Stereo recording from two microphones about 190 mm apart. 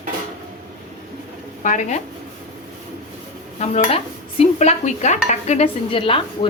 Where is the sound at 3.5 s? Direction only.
35° left (ahead or behind).